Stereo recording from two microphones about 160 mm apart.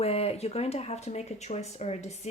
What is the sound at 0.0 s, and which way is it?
Speech, 40° left (ahead or behind).